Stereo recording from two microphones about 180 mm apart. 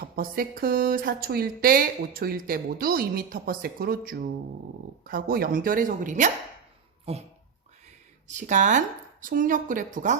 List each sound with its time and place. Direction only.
0.0 s a woman's voice: 55° right (ahead or behind); by 7.2 s 35° right (ahead or behind)
7.9 s a sound: 40° right (ahead or behind)
9.2 s a woman's voice: 50° right (ahead or behind)